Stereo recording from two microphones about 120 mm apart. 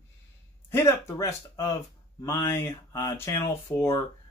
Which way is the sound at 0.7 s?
20° left (ahead or behind).